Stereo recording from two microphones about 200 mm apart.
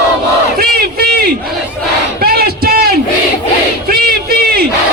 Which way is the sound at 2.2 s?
50° right (ahead or behind).